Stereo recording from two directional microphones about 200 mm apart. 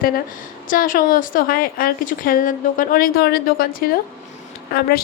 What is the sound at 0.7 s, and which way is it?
A woman's voice, 45° left (ahead or behind).